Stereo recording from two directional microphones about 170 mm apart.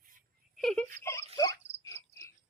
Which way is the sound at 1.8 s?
15° left (ahead or behind).